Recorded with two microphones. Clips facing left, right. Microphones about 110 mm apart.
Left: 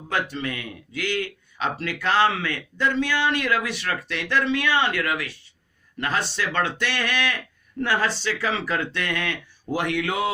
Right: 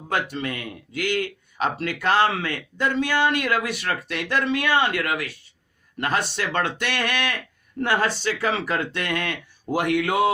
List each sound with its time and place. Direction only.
0.1 s a man's voice: 45° right (ahead or behind)